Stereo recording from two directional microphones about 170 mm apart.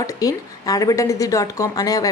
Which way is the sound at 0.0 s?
20° left (ahead or behind).